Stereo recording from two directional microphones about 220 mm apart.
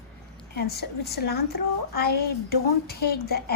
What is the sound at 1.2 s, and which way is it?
A woman's voice, 45° left (ahead or behind).